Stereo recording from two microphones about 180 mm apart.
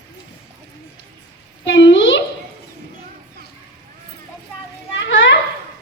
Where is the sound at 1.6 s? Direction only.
85° left.